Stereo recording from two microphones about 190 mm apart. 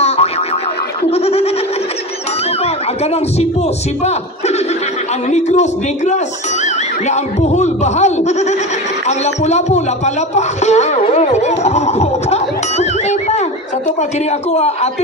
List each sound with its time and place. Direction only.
0.0 s music: 35° left (ahead or behind)
1.1 s laughter: 30° left (ahead or behind)
2.6 s a sound: 35° left (ahead or behind)
5.3 s speech: 40° left (ahead or behind)